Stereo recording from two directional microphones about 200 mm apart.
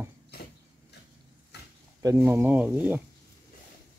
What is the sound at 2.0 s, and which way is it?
Speech, 15° right (ahead or behind).